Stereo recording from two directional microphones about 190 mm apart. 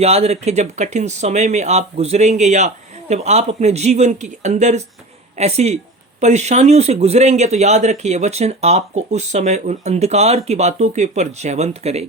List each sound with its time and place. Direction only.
0.0 s speech: 35° right (ahead or behind)